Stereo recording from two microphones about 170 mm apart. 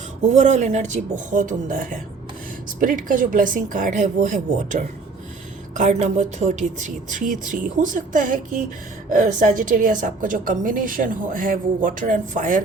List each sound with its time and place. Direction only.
0.3 s a woman's voice: 45° right (ahead or behind)